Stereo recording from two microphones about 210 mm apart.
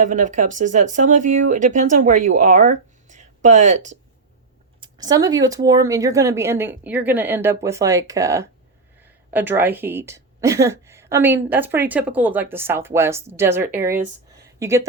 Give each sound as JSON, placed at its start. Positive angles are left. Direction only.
{"t": 0.0, "sound": "speech", "side_deg": -35}
{"t": 4.8, "sound": "speech", "side_deg": -20}